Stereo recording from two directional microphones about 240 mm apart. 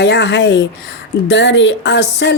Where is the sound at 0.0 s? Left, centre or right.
Left.